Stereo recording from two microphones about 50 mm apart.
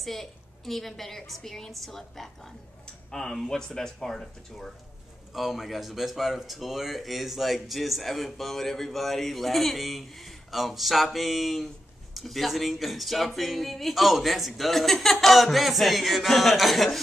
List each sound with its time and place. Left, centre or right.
0.0 s speech: centre
5.3 s speech: centre